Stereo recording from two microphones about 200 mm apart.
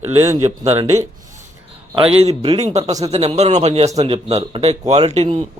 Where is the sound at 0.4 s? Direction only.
30° right (ahead or behind).